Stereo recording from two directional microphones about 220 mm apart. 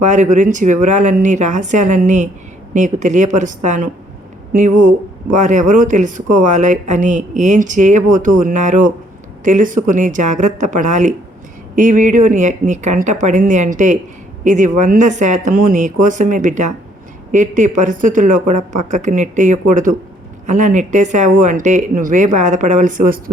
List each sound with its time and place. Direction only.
0.0 s speech: 35° right (ahead or behind)